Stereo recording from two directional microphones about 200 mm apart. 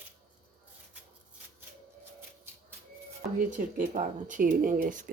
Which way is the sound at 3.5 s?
40° right (ahead or behind).